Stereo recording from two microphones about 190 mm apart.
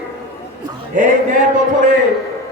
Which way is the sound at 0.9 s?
40° right (ahead or behind).